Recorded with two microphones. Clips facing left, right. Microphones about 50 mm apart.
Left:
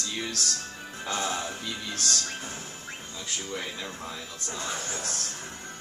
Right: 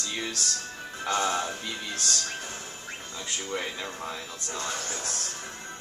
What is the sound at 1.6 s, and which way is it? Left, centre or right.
Speech, centre.